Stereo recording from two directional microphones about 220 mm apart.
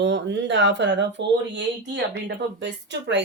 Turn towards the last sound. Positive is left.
turn(degrees=-55)  # may be behind; listen again after turning